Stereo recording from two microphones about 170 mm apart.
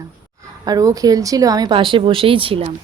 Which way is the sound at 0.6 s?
20° right (ahead or behind).